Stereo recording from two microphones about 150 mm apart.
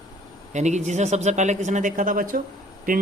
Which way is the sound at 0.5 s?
50° right (ahead or behind).